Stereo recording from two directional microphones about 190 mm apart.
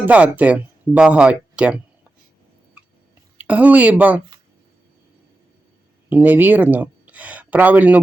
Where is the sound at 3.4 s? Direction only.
5° right (ahead or behind).